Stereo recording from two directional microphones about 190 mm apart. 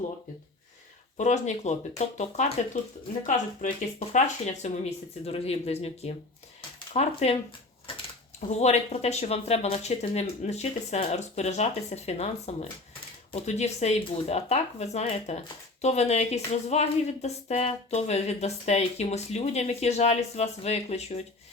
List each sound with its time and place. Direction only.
1.1 s speech: 40° left (ahead or behind)
8.4 s speech: 35° left (ahead or behind)